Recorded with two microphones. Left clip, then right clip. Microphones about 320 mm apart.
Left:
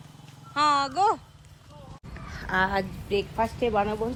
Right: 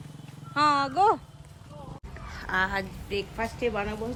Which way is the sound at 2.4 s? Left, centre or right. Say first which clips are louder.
Left 2 dB; centre.